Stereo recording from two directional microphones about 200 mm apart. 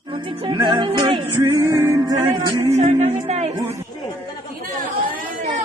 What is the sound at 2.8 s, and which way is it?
Speech, 35° right (ahead or behind).